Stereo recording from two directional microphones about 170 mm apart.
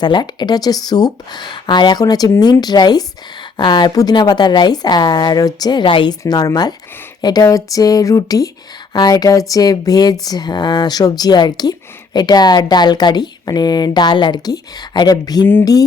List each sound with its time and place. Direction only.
0.0 s speech: 25° left (ahead or behind)